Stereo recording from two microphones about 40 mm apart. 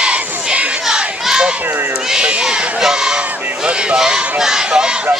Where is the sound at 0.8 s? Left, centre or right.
Centre.